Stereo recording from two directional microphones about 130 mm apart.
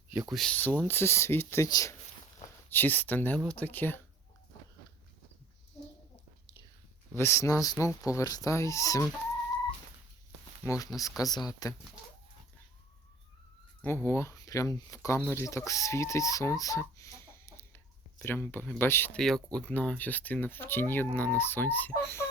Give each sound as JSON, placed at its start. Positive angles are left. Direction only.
{"t": 0.3, "sound": "speech", "side_deg": 0}
{"t": 0.5, "sound": "speech", "side_deg": 10}
{"t": 2.6, "sound": "speech", "side_deg": 15}
{"t": 7.2, "sound": "speech", "side_deg": 20}
{"t": 10.6, "sound": "speech", "side_deg": 20}
{"t": 11.2, "sound": "speech", "side_deg": 30}
{"t": 13.8, "sound": "speech", "side_deg": 20}
{"t": 19.2, "sound": "speech", "side_deg": 5}